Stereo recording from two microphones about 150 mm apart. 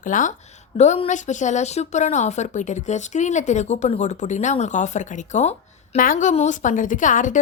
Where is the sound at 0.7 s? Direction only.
50° left (ahead or behind).